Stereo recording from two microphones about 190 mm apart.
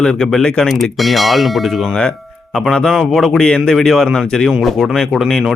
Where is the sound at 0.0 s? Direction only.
Centre (ahead or behind).